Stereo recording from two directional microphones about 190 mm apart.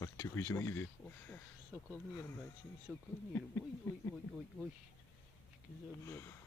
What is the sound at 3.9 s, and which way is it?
Speech, 15° left (ahead or behind).